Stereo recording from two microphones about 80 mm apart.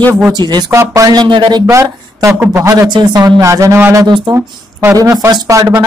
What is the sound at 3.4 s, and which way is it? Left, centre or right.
Speech, right.